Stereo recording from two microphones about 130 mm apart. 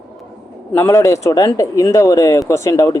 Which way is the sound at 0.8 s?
20° left (ahead or behind).